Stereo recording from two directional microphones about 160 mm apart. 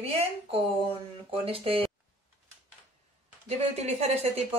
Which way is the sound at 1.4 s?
35° right (ahead or behind).